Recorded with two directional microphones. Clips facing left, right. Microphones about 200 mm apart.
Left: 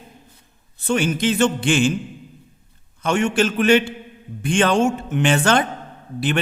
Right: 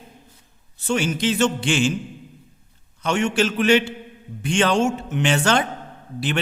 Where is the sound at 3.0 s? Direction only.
50° left (ahead or behind).